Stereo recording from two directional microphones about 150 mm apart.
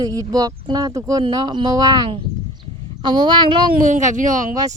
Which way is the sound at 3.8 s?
55° right (ahead or behind).